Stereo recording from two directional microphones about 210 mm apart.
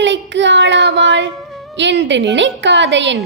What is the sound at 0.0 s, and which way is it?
Child singing, 60° right (ahead or behind).